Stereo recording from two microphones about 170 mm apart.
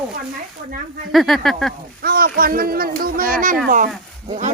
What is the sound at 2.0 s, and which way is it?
Speech, 60° right (ahead or behind).